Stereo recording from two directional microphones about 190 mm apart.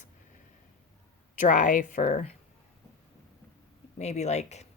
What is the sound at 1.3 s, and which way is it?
Speech, 40° left (ahead or behind).